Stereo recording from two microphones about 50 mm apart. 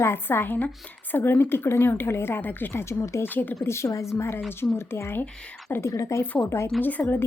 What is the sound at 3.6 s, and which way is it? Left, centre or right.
Speech, left.